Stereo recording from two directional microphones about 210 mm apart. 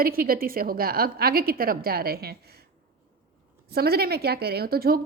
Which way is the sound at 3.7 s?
50° right (ahead or behind).